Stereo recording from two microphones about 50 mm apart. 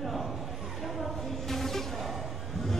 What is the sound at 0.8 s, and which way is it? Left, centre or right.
Music, centre.